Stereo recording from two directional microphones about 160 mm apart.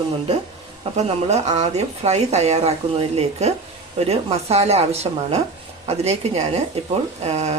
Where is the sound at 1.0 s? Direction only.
45° right (ahead or behind).